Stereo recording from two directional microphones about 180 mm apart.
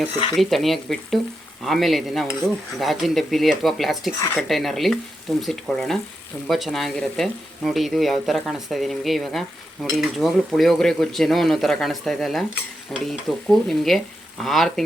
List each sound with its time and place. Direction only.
0.3 s speech: centre (ahead or behind)